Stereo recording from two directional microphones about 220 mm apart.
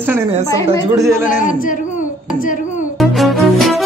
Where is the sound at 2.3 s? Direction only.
35° left (ahead or behind).